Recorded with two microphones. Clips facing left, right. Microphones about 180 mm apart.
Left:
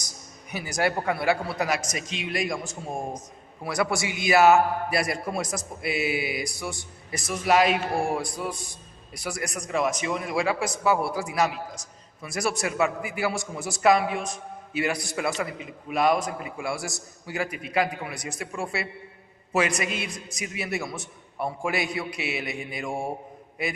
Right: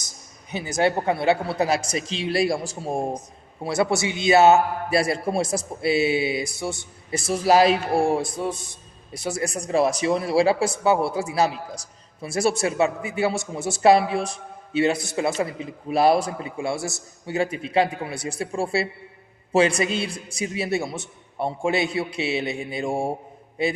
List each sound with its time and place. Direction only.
0.5 s a man's voice: 25° right (ahead or behind)